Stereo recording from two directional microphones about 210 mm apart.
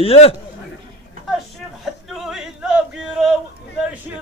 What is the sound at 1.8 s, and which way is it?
Male singing, centre (ahead or behind).